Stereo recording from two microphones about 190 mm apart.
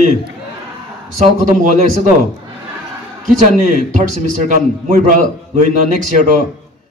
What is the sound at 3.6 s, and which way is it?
A man's voice, 40° right (ahead or behind).